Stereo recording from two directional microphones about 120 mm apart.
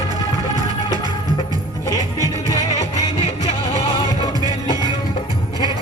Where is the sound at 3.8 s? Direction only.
50° left (ahead or behind).